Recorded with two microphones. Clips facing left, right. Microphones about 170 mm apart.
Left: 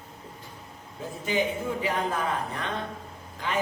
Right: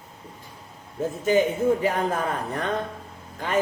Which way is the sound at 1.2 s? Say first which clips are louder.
Right 7 dB; 45° right (ahead or behind).